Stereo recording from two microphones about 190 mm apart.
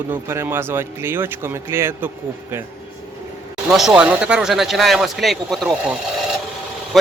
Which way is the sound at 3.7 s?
5° right (ahead or behind).